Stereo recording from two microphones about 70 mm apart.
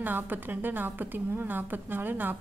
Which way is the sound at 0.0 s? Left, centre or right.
Right.